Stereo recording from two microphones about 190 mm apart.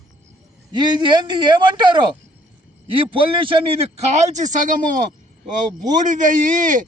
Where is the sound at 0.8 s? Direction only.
25° right (ahead or behind); by 4.8 s 40° right (ahead or behind).